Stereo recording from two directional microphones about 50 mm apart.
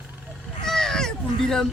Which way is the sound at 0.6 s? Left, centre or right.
Centre.